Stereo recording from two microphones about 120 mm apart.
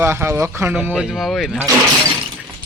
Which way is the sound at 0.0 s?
20° right (ahead or behind).